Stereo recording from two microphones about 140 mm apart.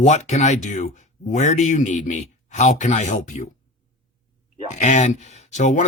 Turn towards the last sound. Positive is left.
turn(degrees=60)  # may be behind; listen again after turning